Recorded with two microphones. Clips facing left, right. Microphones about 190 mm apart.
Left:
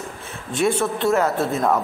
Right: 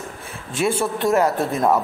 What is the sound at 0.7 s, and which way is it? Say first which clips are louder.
A woman's voice: right 1 dB; 15° right (ahead or behind).